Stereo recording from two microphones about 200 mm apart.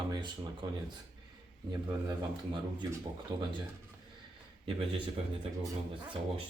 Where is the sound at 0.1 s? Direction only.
20° right (ahead or behind).